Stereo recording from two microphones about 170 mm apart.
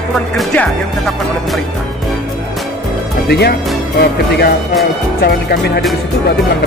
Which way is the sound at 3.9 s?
65° left (ahead or behind).